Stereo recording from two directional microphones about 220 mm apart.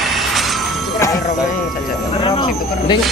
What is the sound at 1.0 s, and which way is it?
Speech, 15° left (ahead or behind).